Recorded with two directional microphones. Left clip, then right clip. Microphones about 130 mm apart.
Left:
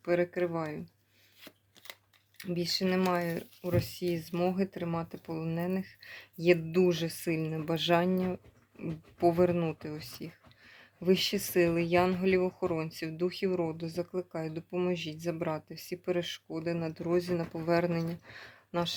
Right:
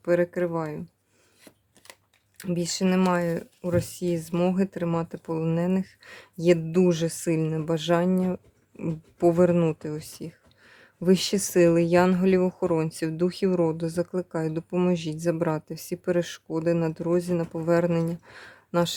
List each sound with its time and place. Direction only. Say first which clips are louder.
0.0 s speech: right 6 dB; 50° right (ahead or behind)
0.3 s speech: right 5 dB; 40° right (ahead or behind)
1.4 s chopping: left 1 dB; 30° right (ahead or behind)
2.4 s speech: right 4 dB; 55° right (ahead or behind); by 8.4 s 35° right (ahead or behind)
8.8 s speech: right 5 dB; 50° right (ahead or behind)
11.1 s speech: right 5 dB; 65° right (ahead or behind); by 18.5 s 45° right (ahead or behind)
18.7 s speech: right 8 dB; 65° right (ahead or behind)